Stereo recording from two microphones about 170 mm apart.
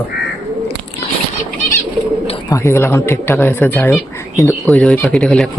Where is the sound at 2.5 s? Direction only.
15° left (ahead or behind).